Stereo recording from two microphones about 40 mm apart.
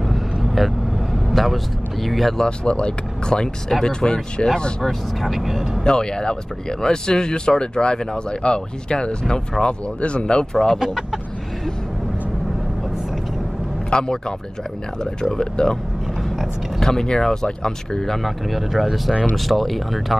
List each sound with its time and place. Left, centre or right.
0.6 s speech: centre
2.3 s speech: left
4.8 s speech: centre
5.9 s speech: centre
10.8 s speech: centre
13.8 s a man's voice: centre
15.5 s speech: centre
16.8 s speech: centre